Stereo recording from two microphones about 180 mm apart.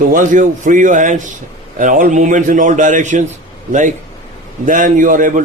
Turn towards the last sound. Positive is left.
turn(degrees=-50)  # may be behind; listen again after turning